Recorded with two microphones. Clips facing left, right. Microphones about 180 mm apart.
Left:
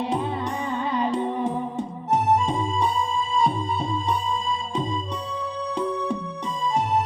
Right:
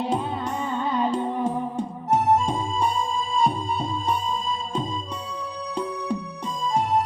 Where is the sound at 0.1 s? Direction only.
Centre (ahead or behind).